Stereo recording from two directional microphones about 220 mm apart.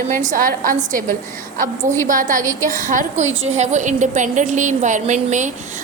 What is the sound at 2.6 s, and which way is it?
A woman's voice, 35° right (ahead or behind).